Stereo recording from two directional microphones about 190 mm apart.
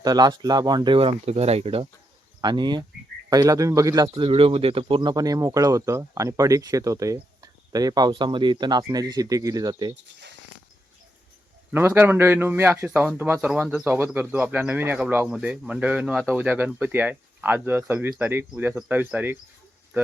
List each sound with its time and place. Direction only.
0.0 s a man's voice: 20° right (ahead or behind)
4.1 s speech: 30° right (ahead or behind)
11.7 s a man's voice: 10° right (ahead or behind)